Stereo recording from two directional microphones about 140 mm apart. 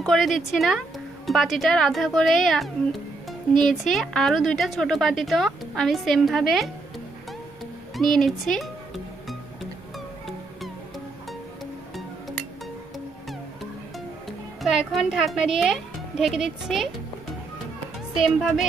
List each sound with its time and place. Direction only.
0.0 s speech: centre (ahead or behind)
7.9 s speech: centre (ahead or behind)
14.6 s speech: centre (ahead or behind)